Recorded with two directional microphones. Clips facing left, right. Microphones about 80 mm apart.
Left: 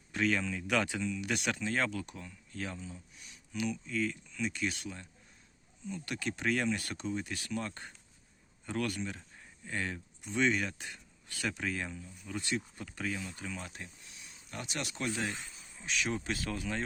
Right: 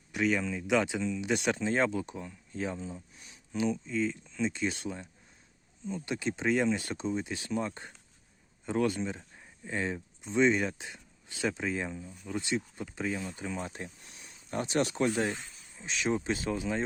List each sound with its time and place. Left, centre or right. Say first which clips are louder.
0.1 s speech: right 2 dB; centre
13.1 s speech: right 5 dB; right